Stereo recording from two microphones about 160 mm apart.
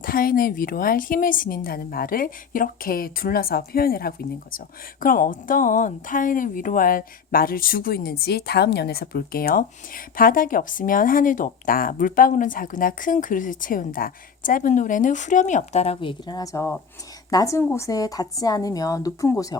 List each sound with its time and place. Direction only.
0.0 s a woman's voice: 65° left (ahead or behind); by 19.5 s 20° left (ahead or behind)